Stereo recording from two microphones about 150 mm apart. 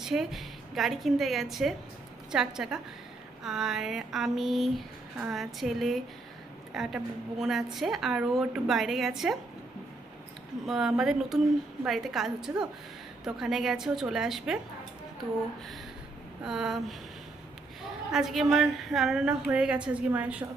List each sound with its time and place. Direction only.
0.0 s a woman's voice: centre (ahead or behind)
10.7 s a woman's voice: 5° right (ahead or behind)
16.4 s a woman's voice: 5° right (ahead or behind)
18.1 s a woman's voice: centre (ahead or behind)